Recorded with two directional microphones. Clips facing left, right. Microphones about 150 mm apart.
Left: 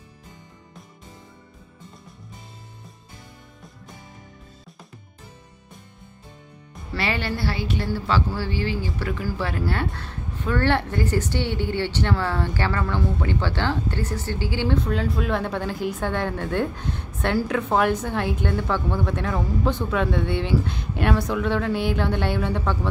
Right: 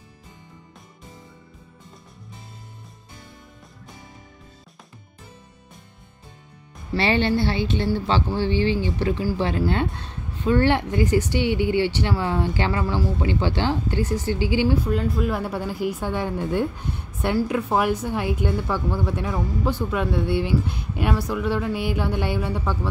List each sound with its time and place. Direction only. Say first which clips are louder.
7.0 s a woman's voice: right 6 dB; 25° right (ahead or behind)
14.9 s speech: right 1 dB; centre (ahead or behind)